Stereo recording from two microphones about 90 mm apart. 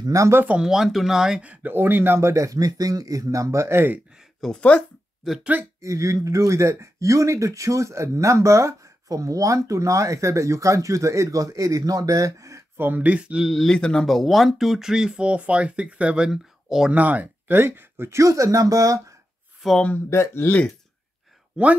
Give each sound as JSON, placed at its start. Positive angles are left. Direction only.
{"t": 0.0, "sound": "speech", "side_deg": -40}
{"t": 0.4, "sound": "speech", "side_deg": -15}
{"t": 0.7, "sound": "speech", "side_deg": -5}
{"t": 1.4, "sound": "speech", "side_deg": -15}
{"t": 4.4, "sound": "speech", "side_deg": 10}
{"t": 5.4, "sound": "speech", "side_deg": -20}
{"t": 5.8, "sound": "speech", "side_deg": -35}
{"t": 13.7, "sound": "speech", "side_deg": 10}
{"t": 16.9, "sound": "speech", "side_deg": -15}
{"t": 19.6, "sound": "speech", "side_deg": -5}
{"t": 20.1, "sound": "speech", "side_deg": 30}
{"t": 21.5, "sound": "speech", "side_deg": -15}